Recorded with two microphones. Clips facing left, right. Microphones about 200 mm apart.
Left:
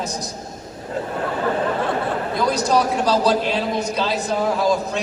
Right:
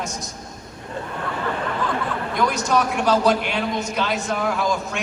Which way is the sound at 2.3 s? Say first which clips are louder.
Left 2 dB; 35° left (ahead or behind).